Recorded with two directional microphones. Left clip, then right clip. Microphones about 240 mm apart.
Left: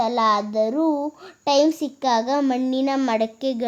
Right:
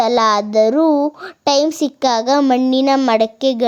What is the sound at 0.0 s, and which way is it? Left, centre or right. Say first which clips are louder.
A child's voice: right 6 dB; right.